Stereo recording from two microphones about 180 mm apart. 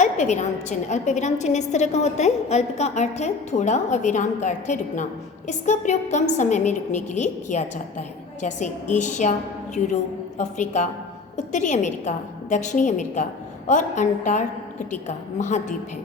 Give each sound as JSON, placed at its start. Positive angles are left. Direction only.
{"t": 0.0, "sound": "a woman's voice", "side_deg": 40}